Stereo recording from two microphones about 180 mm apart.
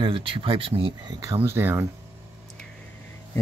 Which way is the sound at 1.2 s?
15° right (ahead or behind).